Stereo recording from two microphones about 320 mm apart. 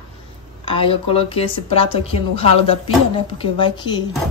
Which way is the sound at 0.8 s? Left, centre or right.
Centre.